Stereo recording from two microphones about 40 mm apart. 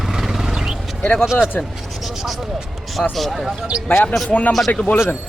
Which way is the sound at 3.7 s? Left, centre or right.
Right.